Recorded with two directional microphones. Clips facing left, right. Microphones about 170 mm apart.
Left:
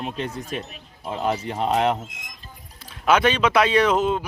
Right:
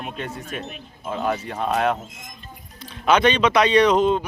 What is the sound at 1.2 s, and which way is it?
Speech, 20° left (ahead or behind).